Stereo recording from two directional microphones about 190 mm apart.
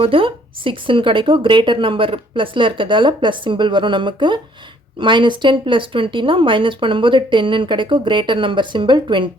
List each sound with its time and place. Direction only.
0.0 s speech: 30° right (ahead or behind)